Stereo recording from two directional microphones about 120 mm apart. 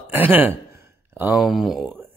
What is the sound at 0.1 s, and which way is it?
Speech, 15° right (ahead or behind).